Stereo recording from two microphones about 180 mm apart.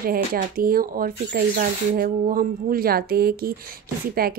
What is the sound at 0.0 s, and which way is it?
Speech, 55° right (ahead or behind).